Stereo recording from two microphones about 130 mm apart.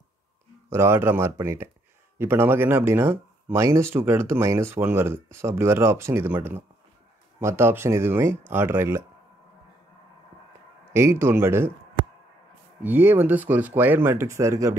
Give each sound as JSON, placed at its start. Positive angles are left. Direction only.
{"t": 0.7, "sound": "speech", "side_deg": -20}
{"t": 10.9, "sound": "speech", "side_deg": -20}
{"t": 12.8, "sound": "speech", "side_deg": -15}